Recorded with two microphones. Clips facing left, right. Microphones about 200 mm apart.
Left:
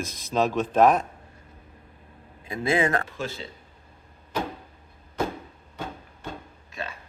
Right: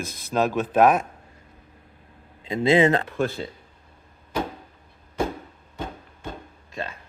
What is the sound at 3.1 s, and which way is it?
Speech, 60° right (ahead or behind).